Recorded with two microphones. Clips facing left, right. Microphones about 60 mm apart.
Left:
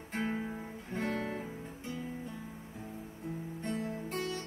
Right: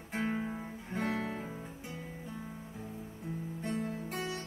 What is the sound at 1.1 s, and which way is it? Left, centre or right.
Guitar, centre.